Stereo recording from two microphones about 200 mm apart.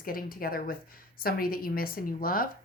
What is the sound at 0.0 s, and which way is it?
A woman's voice, 45° left (ahead or behind).